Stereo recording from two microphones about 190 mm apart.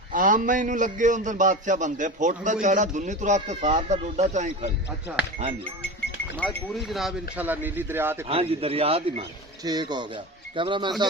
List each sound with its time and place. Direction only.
0.1 s a man's voice: 45° right (ahead or behind)
6.3 s speech: 5° left (ahead or behind); by 8.3 s 10° right (ahead or behind)
8.3 s a man's voice: 30° right (ahead or behind)